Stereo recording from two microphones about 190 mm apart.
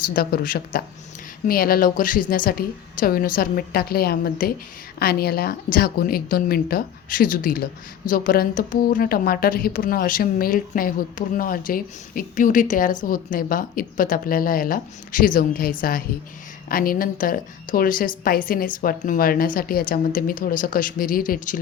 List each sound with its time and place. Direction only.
0.1 s a woman's voice: 50° left (ahead or behind)